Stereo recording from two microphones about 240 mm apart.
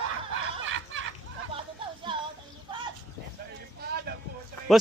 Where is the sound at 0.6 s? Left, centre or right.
Right.